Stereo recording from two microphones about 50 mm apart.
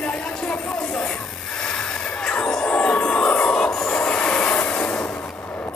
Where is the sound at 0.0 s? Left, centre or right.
Left.